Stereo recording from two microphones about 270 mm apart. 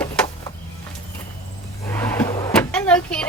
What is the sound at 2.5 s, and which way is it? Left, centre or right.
Vehicle, centre.